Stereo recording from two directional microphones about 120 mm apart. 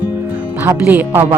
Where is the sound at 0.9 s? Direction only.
15° right (ahead or behind).